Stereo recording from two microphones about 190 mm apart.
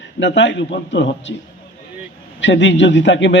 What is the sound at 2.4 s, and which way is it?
Speech, 70° left (ahead or behind).